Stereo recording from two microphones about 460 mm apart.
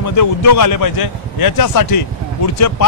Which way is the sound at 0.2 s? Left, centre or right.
Left.